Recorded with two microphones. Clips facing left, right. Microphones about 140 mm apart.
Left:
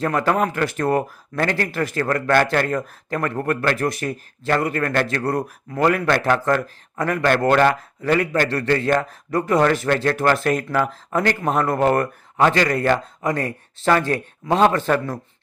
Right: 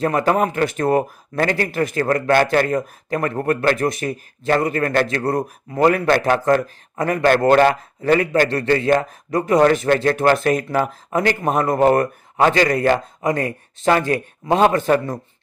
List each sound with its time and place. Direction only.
0.0 s speech: 20° right (ahead or behind)